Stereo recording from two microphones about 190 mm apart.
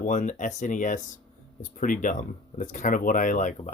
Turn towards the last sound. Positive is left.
turn(degrees=40)  # may be behind; listen again after turning